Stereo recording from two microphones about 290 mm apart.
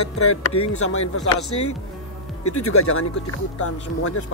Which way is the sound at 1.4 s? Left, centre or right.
Left.